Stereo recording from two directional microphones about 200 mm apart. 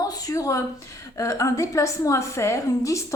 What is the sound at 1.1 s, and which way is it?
A woman's voice, 15° left (ahead or behind).